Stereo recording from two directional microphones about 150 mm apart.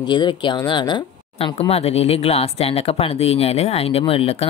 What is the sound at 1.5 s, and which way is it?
Speech, 45° left (ahead or behind).